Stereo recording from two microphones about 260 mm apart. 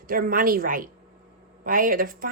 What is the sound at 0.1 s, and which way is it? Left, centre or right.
A woman's voice, right.